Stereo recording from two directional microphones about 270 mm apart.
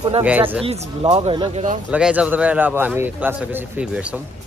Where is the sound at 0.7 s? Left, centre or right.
Right.